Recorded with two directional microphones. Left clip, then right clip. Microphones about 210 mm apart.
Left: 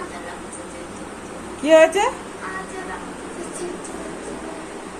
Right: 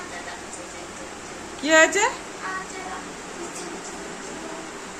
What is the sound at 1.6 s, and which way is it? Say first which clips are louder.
Speech: left 4 dB; 10° right (ahead or behind).